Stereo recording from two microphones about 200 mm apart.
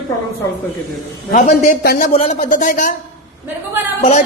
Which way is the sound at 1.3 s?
40° left (ahead or behind).